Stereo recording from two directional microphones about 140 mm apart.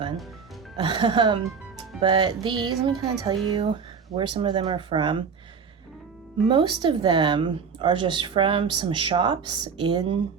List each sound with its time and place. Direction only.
0.8 s a woman's voice: 35° right (ahead or behind)
6.5 s a woman's voice: 35° right (ahead or behind)